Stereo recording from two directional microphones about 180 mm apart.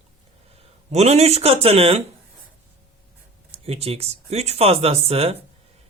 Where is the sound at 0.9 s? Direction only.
35° right (ahead or behind).